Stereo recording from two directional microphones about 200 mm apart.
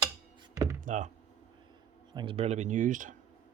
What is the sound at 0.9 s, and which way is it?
Speech, 40° right (ahead or behind).